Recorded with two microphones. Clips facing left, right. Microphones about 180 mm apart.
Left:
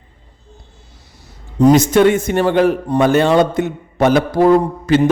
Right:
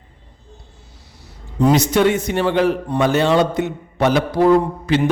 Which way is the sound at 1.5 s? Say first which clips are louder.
Left 5 dB; 45° left (ahead or behind).